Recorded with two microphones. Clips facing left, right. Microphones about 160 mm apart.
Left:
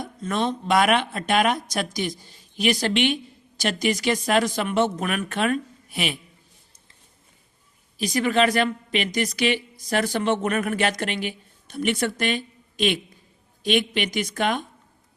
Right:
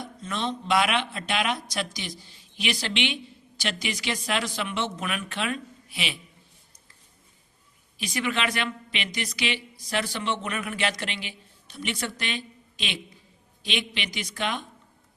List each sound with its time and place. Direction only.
0.0 s a woman's voice: 50° left (ahead or behind)
7.9 s a woman's voice: 40° left (ahead or behind)